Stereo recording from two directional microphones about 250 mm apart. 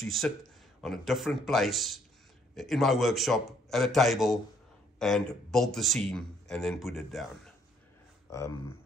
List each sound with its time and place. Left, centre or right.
0.0 s a man's voice: centre